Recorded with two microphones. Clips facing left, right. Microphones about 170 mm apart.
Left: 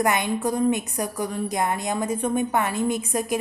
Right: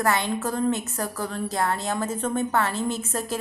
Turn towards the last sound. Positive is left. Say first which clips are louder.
# left 3 dB
turn(degrees=15)  # may be behind; listen again after turning